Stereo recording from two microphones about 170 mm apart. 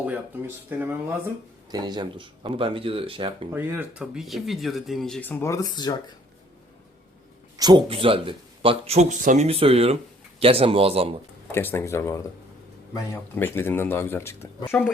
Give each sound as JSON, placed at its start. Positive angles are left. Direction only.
{"t": 0.0, "sound": "speech", "side_deg": -10}
{"t": 1.7, "sound": "speech", "side_deg": -25}
{"t": 3.5, "sound": "speech", "side_deg": -10}
{"t": 7.5, "sound": "speech", "side_deg": -25}
{"t": 11.5, "sound": "speech", "side_deg": 15}